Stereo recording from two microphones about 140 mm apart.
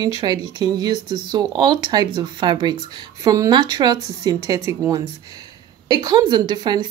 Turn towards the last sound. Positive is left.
turn(degrees=-30)  # may be behind; listen again after turning